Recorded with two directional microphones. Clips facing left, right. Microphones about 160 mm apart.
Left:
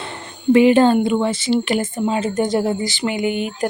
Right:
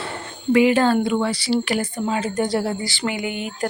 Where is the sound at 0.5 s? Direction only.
25° left (ahead or behind).